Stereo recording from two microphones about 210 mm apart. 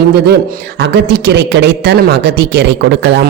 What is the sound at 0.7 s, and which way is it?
Speech, 55° right (ahead or behind).